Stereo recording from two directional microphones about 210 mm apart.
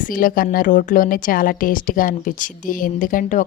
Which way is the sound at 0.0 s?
40° left (ahead or behind).